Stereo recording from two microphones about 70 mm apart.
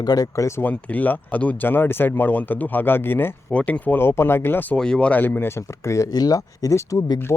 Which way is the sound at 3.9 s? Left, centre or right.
Left.